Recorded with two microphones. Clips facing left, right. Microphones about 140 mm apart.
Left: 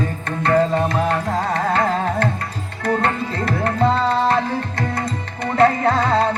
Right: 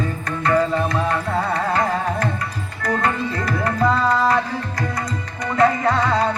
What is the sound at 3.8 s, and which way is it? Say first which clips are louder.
Tabla: even; 25° left (ahead or behind).